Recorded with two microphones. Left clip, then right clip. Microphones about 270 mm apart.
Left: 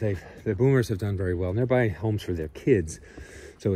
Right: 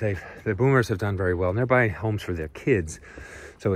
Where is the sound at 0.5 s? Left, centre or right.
Right.